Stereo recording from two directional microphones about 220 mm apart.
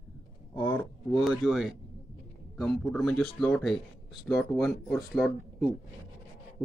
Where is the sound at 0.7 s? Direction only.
Centre (ahead or behind).